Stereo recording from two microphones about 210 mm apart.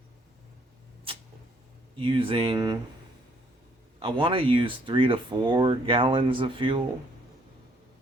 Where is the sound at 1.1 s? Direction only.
25° right (ahead or behind).